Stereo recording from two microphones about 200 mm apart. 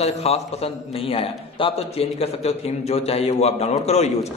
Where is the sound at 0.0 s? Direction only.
30° left (ahead or behind).